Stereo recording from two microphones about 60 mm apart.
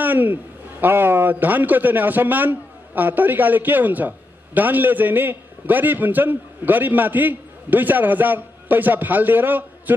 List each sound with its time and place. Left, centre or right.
0.0 s a man's voice: right